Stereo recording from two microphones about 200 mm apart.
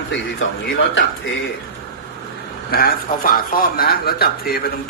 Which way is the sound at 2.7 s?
45° left (ahead or behind).